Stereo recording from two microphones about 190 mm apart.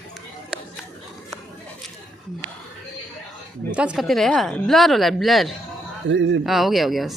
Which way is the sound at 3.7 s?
5° right (ahead or behind).